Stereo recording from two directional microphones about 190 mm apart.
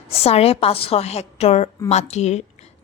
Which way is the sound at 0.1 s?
30° left (ahead or behind).